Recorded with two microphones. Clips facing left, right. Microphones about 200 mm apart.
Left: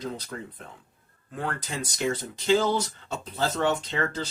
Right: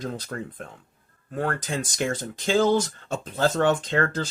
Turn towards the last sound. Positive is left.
turn(degrees=-50)  # may be behind; listen again after turning